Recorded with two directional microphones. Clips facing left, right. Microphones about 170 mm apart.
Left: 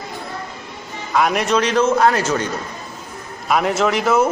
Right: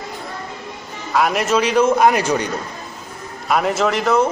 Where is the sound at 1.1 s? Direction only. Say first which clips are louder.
Even; centre (ahead or behind).